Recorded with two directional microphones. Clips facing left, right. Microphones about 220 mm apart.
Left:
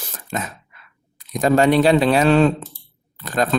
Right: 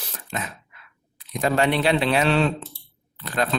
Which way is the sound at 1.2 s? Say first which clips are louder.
Left 6 dB; 45° left (ahead or behind).